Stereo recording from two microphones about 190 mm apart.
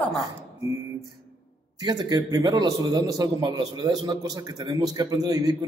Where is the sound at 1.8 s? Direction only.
20° right (ahead or behind).